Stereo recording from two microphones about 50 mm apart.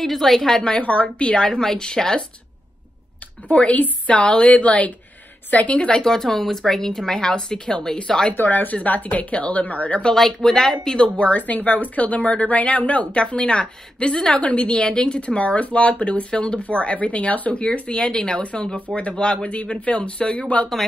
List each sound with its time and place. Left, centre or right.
0.0 s a woman's voice: centre
3.4 s a woman's voice: left
8.4 s speech: left
10.1 s a woman's voice: centre
11.1 s speech: left